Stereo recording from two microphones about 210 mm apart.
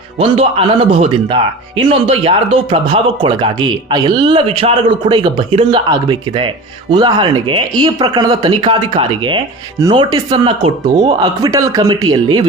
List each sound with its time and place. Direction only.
0.2 s speech: 25° right (ahead or behind)